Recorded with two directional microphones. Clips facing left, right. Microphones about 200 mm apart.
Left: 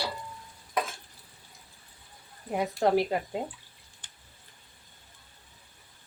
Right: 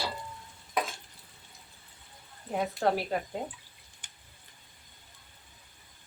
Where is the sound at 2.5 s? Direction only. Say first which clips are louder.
Left 3 dB; 15° left (ahead or behind).